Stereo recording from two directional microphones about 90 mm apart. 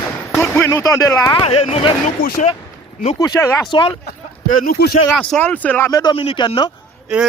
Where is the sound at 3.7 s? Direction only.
70° left (ahead or behind).